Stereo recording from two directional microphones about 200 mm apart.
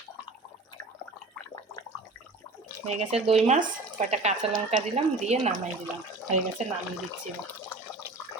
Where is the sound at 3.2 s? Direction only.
30° right (ahead or behind).